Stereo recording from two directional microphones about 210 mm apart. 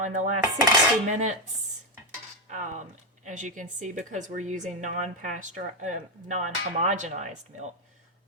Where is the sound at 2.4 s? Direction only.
35° right (ahead or behind).